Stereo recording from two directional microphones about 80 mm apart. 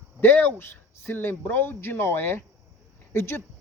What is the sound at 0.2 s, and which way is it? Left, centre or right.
A man's voice, left.